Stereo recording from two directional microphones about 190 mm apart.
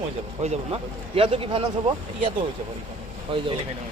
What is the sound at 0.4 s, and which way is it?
Speech, 35° right (ahead or behind).